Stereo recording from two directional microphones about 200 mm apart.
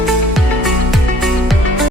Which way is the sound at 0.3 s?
Centre (ahead or behind).